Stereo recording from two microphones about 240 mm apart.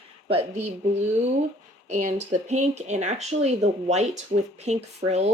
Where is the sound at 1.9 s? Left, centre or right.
Right.